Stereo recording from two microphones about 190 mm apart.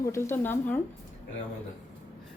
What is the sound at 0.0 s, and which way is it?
Speech, 15° left (ahead or behind).